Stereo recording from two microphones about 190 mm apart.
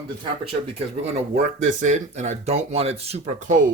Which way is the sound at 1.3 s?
40° right (ahead or behind).